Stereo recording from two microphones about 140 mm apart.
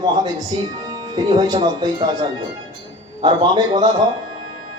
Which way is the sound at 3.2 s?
30° right (ahead or behind).